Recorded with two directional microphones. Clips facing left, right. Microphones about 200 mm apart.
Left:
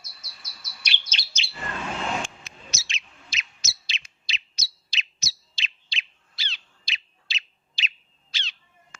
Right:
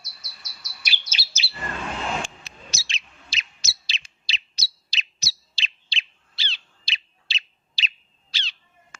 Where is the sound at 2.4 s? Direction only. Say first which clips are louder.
Right 1 dB; 35° right (ahead or behind).